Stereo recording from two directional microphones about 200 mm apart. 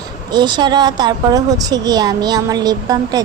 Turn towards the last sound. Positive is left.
turn(degrees=-20)  # may be behind; listen again after turning